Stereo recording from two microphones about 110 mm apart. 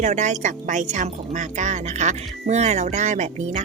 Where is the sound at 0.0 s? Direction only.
90° right.